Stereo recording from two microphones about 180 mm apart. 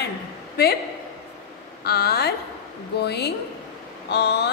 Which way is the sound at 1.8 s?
60° left (ahead or behind).